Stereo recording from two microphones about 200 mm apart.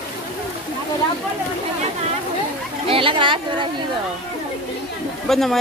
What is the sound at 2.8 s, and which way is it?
Chatter, 25° right (ahead or behind).